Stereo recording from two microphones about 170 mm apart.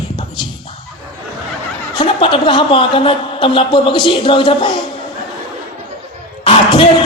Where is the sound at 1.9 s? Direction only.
30° left (ahead or behind).